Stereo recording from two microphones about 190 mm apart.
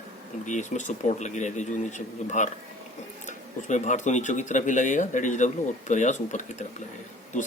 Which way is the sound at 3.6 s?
40° left (ahead or behind).